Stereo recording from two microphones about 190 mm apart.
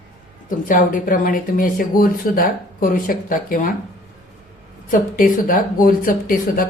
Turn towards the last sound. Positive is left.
turn(degrees=50)  # may be behind; listen again after turning